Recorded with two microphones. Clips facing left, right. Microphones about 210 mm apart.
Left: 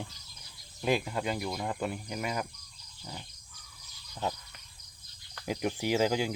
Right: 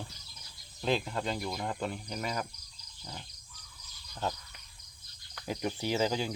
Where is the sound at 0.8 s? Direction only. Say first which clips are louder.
Left 2 dB; 10° left (ahead or behind).